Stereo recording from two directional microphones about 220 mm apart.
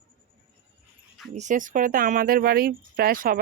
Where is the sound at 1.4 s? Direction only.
35° right (ahead or behind).